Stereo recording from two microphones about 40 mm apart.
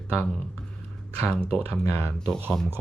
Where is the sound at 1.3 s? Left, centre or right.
Left.